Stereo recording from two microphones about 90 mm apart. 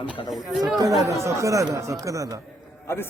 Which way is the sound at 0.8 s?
40° right (ahead or behind).